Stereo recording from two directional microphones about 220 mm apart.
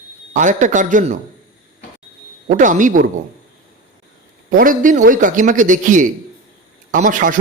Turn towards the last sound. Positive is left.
turn(degrees=-40)  # may be behind; listen again after turning